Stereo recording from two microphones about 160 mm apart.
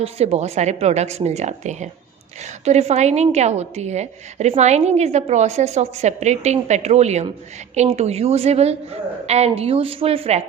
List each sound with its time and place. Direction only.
0.0 s a woman's voice: 40° right (ahead or behind)